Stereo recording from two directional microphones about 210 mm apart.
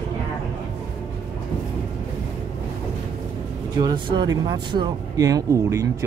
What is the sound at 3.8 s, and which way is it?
Speech, 20° right (ahead or behind).